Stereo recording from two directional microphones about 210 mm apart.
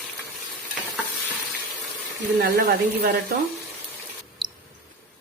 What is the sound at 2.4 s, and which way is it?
Speech, 45° right (ahead or behind).